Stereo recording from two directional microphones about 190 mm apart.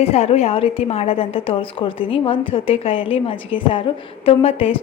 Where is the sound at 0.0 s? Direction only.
35° left (ahead or behind).